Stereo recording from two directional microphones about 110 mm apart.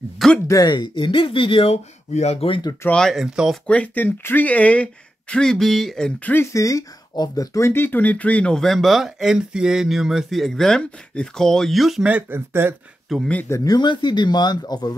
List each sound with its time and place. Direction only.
0.5 s speech: 40° left (ahead or behind); by 2.6 s 60° left (ahead or behind)
2.9 s speech: 5° left (ahead or behind)
3.6 s speech: 15° left (ahead or behind)
6.4 s speech: 30° left (ahead or behind); by 12.1 s centre (ahead or behind)
12.1 s speech: 20° right (ahead or behind)
13.1 s speech: centre (ahead or behind)
13.7 s speech: 45° left (ahead or behind)